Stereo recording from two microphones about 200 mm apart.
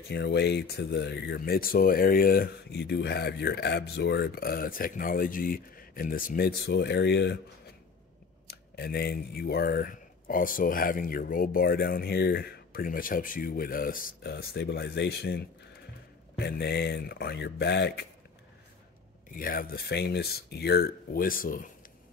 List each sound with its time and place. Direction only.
0.1 s speech: 55° left (ahead or behind)
8.5 s speech: 50° left (ahead or behind)
19.3 s speech: 45° left (ahead or behind)